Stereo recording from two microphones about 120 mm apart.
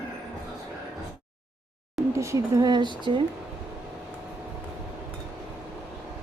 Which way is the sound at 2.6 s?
40° right (ahead or behind).